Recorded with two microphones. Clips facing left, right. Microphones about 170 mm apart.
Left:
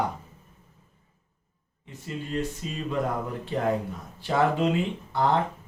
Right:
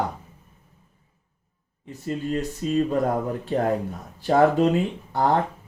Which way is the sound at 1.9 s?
45° right (ahead or behind).